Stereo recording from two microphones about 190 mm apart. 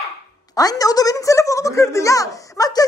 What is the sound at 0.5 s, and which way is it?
A man's voice, 20° left (ahead or behind).